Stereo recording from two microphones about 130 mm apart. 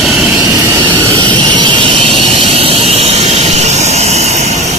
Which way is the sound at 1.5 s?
40° right (ahead or behind).